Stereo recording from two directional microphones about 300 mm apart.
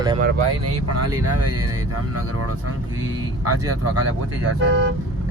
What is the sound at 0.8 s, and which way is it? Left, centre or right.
Speech, right.